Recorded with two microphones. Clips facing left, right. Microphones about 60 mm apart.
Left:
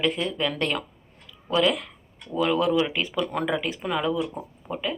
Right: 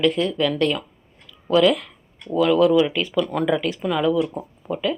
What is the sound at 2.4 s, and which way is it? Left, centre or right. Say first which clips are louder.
Speech: right 6 dB; left.